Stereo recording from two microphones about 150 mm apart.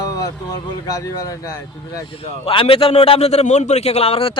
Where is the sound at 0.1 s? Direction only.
25° left (ahead or behind).